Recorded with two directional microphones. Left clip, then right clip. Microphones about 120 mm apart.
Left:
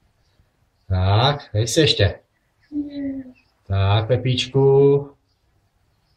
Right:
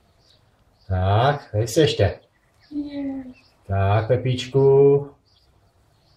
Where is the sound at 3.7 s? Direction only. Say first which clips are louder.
Right 1 dB; 20° left (ahead or behind).